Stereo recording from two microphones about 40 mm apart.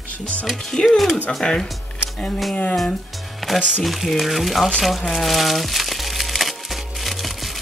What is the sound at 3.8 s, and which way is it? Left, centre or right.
Speech, centre.